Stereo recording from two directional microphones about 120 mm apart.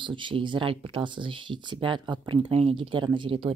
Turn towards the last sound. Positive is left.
turn(degrees=-45)  # may be behind; listen again after turning